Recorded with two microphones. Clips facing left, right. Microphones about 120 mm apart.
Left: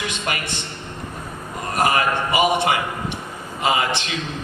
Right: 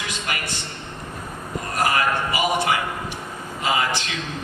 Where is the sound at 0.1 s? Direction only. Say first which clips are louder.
Left 2 dB; 20° left (ahead or behind).